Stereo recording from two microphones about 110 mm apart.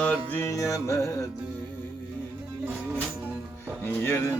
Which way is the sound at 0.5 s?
30° left (ahead or behind).